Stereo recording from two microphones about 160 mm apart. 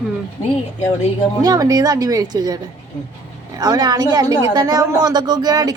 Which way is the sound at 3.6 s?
25° right (ahead or behind).